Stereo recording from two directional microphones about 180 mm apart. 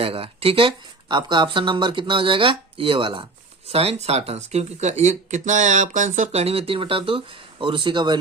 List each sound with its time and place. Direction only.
0.0 s speech: 30° right (ahead or behind)